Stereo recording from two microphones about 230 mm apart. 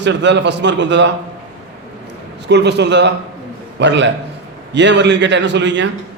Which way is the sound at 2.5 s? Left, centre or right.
Right.